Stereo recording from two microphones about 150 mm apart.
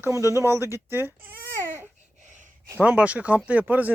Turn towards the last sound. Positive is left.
turn(degrees=-10)  # may be behind; listen again after turning